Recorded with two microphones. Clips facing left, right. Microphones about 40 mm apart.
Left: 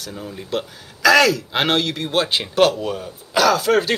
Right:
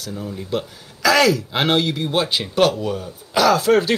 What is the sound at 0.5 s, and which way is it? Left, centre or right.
Speech, centre.